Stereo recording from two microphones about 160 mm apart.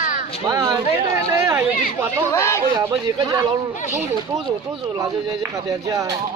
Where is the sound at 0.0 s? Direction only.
55° left (ahead or behind).